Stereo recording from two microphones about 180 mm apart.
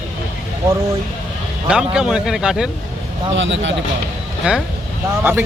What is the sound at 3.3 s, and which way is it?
Speech, 90° right.